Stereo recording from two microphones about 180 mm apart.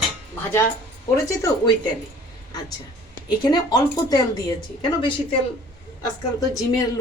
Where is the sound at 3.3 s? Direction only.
25° left (ahead or behind).